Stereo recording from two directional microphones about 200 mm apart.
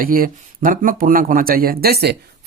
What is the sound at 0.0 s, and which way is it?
Speech, 45° right (ahead or behind).